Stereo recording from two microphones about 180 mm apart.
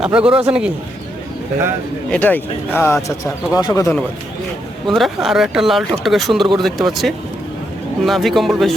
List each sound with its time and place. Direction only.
0.0 s speech: 5° right (ahead or behind)
2.0 s speech: 10° left (ahead or behind)
4.9 s speech: centre (ahead or behind)